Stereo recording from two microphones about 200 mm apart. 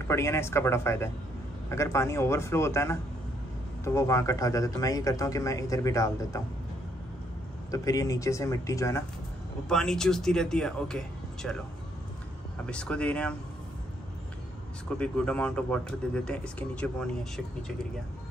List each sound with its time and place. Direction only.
0.1 s speech: 15° left (ahead or behind)
7.7 s speech: 15° left (ahead or behind)
9.7 s speech: 5° left (ahead or behind)
12.6 s speech: 5° left (ahead or behind)
14.9 s speech: 5° left (ahead or behind)